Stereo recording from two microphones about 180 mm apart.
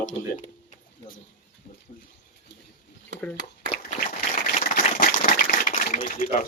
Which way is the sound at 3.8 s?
45° left (ahead or behind).